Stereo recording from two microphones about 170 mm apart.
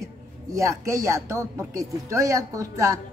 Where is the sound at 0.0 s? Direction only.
20° right (ahead or behind).